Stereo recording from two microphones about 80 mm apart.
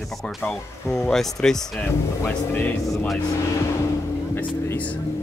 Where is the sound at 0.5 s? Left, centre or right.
Centre.